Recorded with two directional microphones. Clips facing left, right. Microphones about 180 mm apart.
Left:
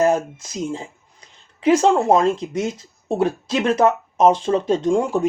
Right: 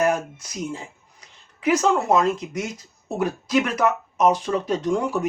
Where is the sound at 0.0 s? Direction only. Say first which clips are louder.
Left 4 dB; 25° left (ahead or behind).